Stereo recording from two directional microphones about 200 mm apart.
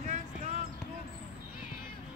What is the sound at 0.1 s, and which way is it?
Basketball bounce, 35° right (ahead or behind).